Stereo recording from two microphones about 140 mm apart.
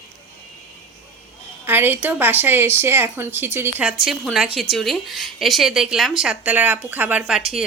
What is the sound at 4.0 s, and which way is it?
A woman's voice, centre (ahead or behind).